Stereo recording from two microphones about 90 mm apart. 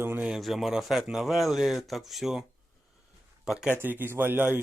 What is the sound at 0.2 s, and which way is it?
Speech, 5° right (ahead or behind).